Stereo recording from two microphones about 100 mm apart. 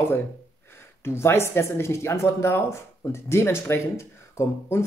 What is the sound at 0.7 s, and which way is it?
Speech, 25° left (ahead or behind).